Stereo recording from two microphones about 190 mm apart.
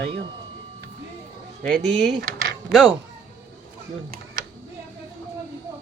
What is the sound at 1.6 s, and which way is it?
Speech, 5° left (ahead or behind).